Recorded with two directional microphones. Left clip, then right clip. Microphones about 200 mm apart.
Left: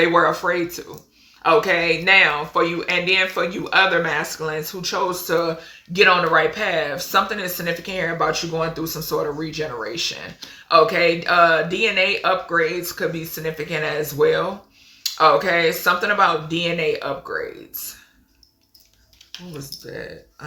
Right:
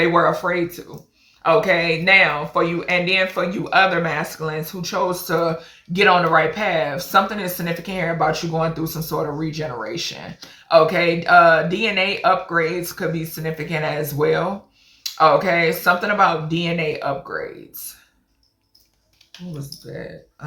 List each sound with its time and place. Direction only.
0.0 s speech: 15° left (ahead or behind)
19.3 s speech: 15° left (ahead or behind)